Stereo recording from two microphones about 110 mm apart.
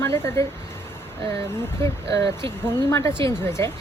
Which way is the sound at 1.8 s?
30° left (ahead or behind).